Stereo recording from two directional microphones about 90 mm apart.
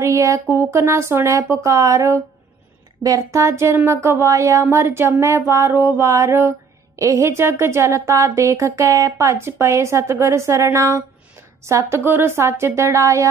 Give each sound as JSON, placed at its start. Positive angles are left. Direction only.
{"t": 0.0, "sound": "speech", "side_deg": -35}